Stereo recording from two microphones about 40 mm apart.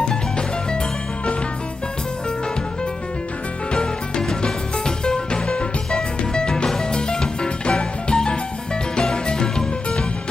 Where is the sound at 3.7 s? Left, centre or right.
Left.